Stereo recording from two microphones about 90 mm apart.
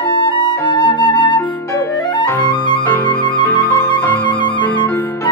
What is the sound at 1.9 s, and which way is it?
Flute, 55° left (ahead or behind).